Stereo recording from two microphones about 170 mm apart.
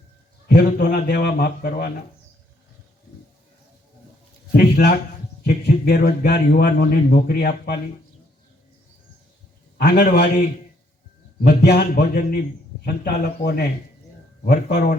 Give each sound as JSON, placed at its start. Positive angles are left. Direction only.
{"t": 0.4, "sound": "a man's voice", "side_deg": 65}
{"t": 4.5, "sound": "a man's voice", "side_deg": 70}
{"t": 9.7, "sound": "speech", "side_deg": 70}
{"t": 11.4, "sound": "a man's voice", "side_deg": 70}